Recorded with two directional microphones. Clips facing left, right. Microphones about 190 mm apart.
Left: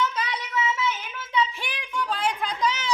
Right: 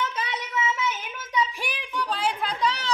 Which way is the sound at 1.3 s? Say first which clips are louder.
Left 1 dB; 5° right (ahead or behind).